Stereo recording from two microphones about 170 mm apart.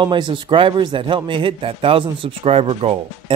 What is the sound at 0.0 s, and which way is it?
A man's voice, 30° right (ahead or behind).